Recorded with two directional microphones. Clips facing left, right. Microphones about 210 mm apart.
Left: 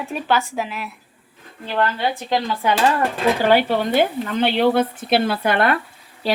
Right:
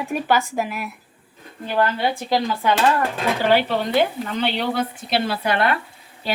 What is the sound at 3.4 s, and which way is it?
Speech, 50° left (ahead or behind).